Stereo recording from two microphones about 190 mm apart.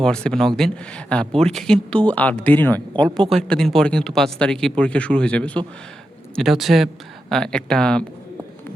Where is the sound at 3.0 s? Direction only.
25° right (ahead or behind).